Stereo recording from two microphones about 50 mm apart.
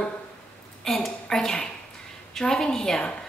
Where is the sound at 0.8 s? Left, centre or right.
Centre.